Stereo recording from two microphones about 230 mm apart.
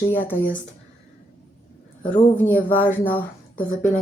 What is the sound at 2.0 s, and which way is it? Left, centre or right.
Speech, left.